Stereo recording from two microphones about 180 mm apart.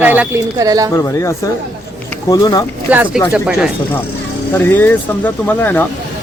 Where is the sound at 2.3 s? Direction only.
20° left (ahead or behind).